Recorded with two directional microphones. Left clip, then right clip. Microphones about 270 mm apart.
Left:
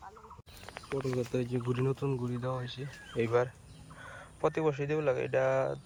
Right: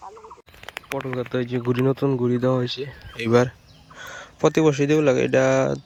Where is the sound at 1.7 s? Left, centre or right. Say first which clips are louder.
Right 12 dB; right.